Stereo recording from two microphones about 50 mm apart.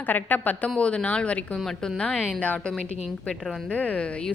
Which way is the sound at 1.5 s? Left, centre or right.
Centre.